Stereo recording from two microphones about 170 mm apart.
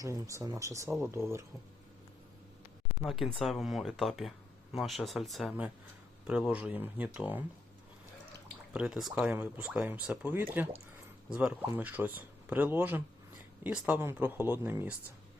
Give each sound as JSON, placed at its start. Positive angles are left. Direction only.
{"t": 0.0, "sound": "speech", "side_deg": -20}
{"t": 3.0, "sound": "speech", "side_deg": 0}
{"t": 8.7, "sound": "speech", "side_deg": -5}